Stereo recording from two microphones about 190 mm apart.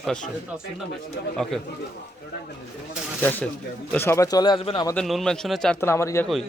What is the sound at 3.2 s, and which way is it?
Speech, 10° left (ahead or behind).